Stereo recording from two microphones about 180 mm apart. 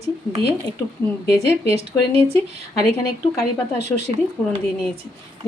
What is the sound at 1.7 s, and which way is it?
Speech, 30° right (ahead or behind).